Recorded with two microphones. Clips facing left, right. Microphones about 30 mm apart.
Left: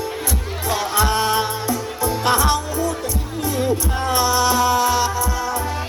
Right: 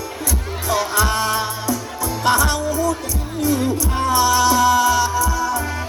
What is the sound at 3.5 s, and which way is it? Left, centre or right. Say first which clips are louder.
Music: right 1 dB; left.